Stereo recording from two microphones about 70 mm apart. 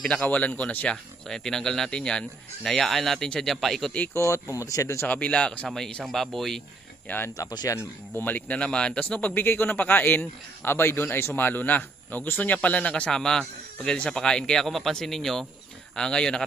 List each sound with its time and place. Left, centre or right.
0.2 s a man's voice: left
1.3 s speech: centre
4.1 s speech: left
5.0 s a man's voice: left; by 6.6 s centre
7.1 s a man's voice: left
7.4 s speech: left
8.1 s a man's voice: left